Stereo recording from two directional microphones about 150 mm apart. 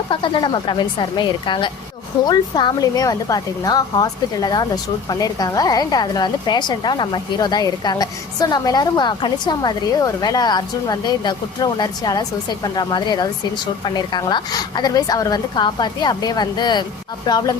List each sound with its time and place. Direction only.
0.1 s a woman's voice: 30° left (ahead or behind)